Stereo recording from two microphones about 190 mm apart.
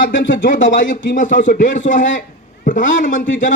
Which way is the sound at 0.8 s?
75° left (ahead or behind).